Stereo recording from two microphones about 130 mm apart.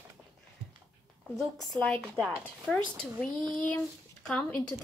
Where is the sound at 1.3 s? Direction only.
Centre (ahead or behind).